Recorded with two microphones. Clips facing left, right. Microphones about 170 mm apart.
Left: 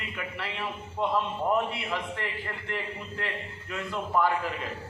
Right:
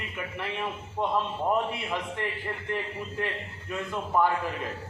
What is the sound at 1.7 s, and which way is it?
Speech, 20° right (ahead or behind).